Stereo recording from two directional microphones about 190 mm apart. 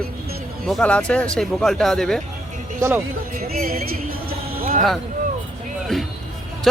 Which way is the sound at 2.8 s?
15° right (ahead or behind).